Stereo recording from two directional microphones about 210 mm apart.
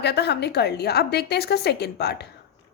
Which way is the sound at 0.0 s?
50° left (ahead or behind).